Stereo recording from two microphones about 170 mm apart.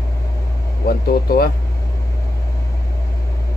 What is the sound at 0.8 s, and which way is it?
Speech, 60° left (ahead or behind).